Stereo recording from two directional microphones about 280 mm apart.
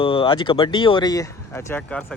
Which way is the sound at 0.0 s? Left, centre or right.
Centre.